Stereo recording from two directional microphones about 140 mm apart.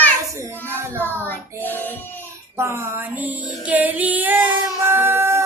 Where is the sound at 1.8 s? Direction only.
15° left (ahead or behind).